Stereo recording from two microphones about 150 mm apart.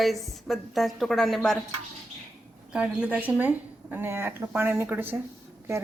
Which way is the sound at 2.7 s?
5° right (ahead or behind).